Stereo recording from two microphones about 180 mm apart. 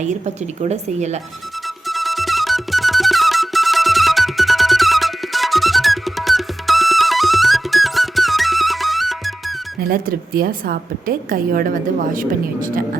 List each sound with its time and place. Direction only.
0.6 s speech: 40° right (ahead or behind)
1.9 s music: centre (ahead or behind)
9.8 s a woman's voice: 55° right (ahead or behind)